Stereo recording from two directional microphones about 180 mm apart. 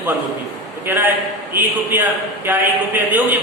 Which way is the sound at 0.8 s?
10° right (ahead or behind).